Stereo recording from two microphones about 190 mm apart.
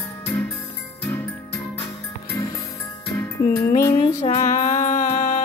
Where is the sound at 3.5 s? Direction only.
50° left (ahead or behind).